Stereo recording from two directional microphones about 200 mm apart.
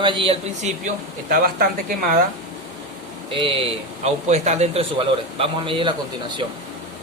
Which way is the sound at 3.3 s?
25° right (ahead or behind).